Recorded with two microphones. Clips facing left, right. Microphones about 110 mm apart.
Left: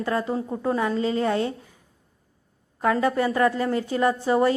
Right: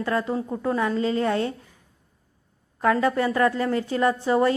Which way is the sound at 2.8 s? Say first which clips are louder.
Right 1 dB; 25° left (ahead or behind).